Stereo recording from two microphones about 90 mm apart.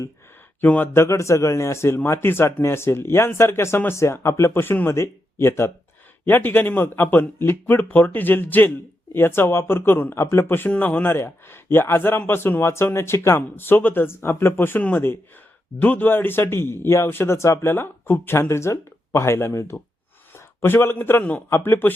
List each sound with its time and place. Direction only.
0.6 s speech: 20° left (ahead or behind)
1.0 s a man's voice: 35° left (ahead or behind)